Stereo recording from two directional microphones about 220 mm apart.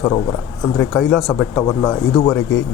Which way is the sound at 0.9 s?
Centre (ahead or behind).